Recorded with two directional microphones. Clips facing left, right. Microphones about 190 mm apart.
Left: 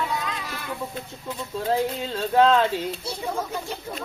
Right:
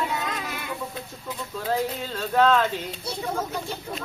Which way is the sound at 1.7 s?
30° left (ahead or behind).